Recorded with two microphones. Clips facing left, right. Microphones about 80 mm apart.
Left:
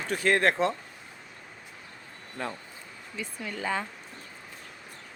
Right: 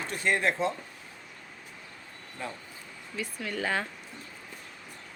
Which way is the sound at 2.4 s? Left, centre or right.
Left.